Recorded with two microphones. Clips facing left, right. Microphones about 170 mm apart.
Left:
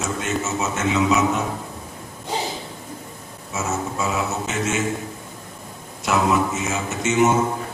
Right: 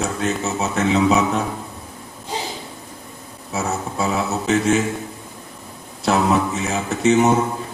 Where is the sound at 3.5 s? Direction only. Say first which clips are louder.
Right 2 dB; 35° right (ahead or behind).